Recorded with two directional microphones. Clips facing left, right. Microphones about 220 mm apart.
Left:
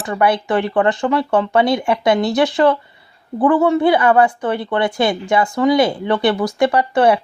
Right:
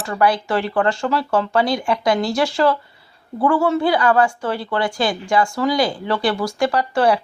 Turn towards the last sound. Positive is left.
turn(degrees=20)  # may be behind; listen again after turning